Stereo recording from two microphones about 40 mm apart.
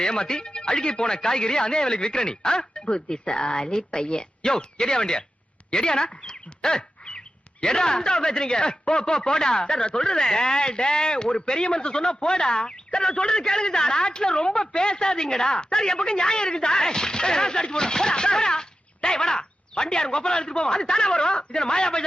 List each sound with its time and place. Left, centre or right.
0.0 s speech: left